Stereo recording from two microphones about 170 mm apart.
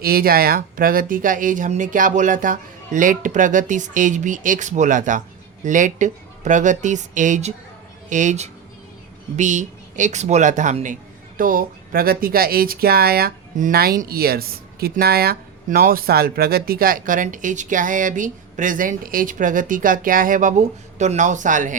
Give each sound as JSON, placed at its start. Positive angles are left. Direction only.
{"t": 0.0, "sound": "speech", "side_deg": -60}